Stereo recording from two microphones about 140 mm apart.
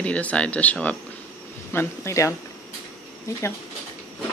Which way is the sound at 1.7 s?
20° left (ahead or behind).